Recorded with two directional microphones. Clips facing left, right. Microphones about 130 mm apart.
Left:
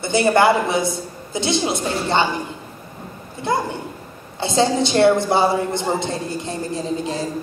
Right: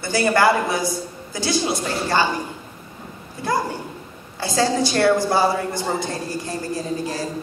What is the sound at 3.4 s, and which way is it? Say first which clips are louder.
A woman's voice: left 1 dB; 25° left (ahead or behind).